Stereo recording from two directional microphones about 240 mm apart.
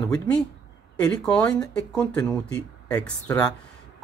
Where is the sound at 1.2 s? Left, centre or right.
Centre.